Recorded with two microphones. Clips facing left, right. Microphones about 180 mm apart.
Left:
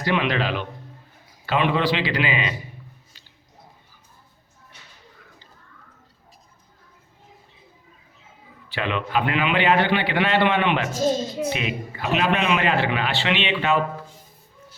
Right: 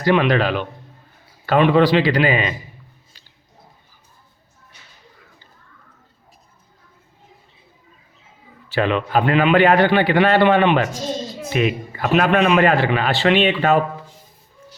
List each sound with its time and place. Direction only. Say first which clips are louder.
0.0 s a man's voice: right 6 dB; 45° right (ahead or behind)
8.7 s a man's voice: right 6 dB; 40° right (ahead or behind)